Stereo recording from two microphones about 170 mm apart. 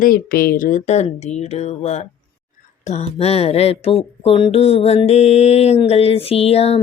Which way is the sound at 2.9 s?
40° left (ahead or behind).